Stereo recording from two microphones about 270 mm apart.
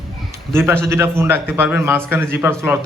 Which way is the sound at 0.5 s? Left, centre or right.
Centre.